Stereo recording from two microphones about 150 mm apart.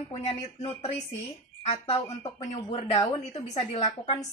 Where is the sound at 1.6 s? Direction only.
40° left (ahead or behind).